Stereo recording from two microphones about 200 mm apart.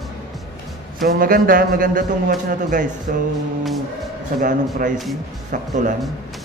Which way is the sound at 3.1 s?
45° right (ahead or behind).